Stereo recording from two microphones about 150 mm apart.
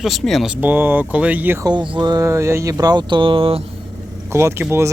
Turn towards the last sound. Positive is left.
turn(degrees=-15)  # may be behind; listen again after turning